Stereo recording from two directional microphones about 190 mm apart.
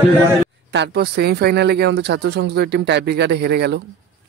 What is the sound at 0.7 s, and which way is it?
Speech, 55° right (ahead or behind).